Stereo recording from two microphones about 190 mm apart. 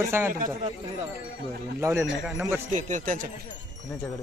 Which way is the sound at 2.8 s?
40° right (ahead or behind).